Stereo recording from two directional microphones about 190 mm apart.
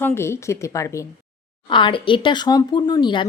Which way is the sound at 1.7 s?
25° left (ahead or behind).